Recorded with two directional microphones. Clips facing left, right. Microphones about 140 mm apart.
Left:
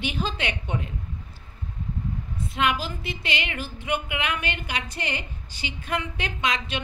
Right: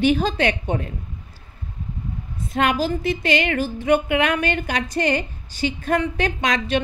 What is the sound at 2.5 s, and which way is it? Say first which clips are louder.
Speech: right 6 dB; 45° right (ahead or behind).